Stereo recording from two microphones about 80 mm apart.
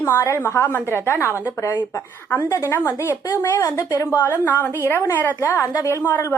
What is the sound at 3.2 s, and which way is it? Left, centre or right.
Speech, left.